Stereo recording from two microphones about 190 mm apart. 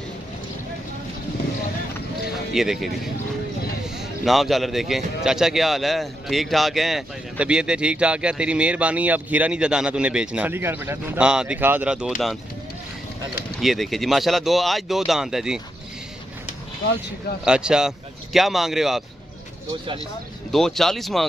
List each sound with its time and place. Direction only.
2.5 s a man's voice: centre (ahead or behind)
4.2 s a man's voice: centre (ahead or behind)
13.6 s a man's voice: centre (ahead or behind)
17.5 s a man's voice: 5° right (ahead or behind)
20.5 s a man's voice: centre (ahead or behind)